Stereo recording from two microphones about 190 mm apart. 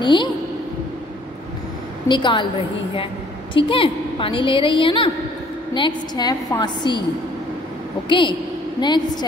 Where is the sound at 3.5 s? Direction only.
25° left (ahead or behind).